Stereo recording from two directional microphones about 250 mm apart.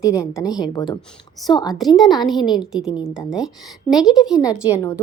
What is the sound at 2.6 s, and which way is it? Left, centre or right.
A woman's voice, centre.